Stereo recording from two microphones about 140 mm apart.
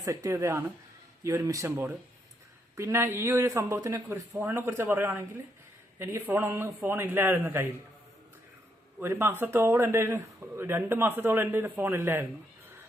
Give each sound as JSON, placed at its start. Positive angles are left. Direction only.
{"t": 0.0, "sound": "speech", "side_deg": -25}
{"t": 9.0, "sound": "speech", "side_deg": -15}